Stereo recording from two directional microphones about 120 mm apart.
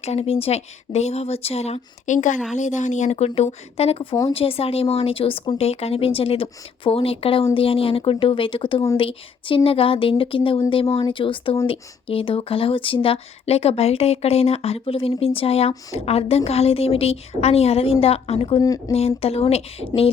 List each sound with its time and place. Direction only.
0.0 s a woman's voice: 60° left (ahead or behind)